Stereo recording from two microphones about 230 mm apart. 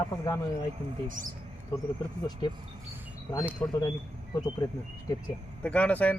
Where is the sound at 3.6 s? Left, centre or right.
Left.